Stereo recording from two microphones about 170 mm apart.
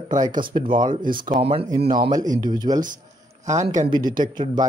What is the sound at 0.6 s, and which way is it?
Speech, 30° right (ahead or behind).